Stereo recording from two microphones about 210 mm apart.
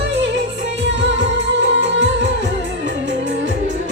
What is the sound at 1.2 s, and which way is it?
Music, 60° right (ahead or behind).